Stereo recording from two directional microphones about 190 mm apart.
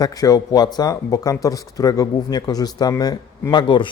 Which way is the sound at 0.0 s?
20° left (ahead or behind).